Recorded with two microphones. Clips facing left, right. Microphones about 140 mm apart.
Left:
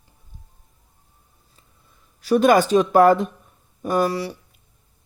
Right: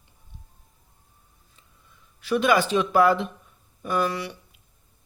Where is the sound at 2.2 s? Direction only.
40° left (ahead or behind).